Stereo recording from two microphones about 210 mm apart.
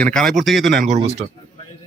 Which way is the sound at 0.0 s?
5° left (ahead or behind).